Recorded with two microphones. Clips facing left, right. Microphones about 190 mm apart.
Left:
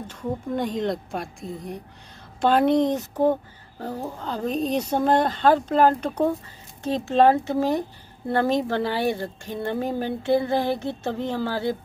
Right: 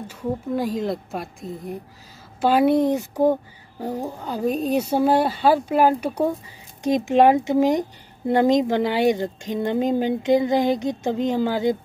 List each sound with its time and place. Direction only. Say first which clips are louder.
0.0 s a woman's voice: right 2 dB; 10° right (ahead or behind)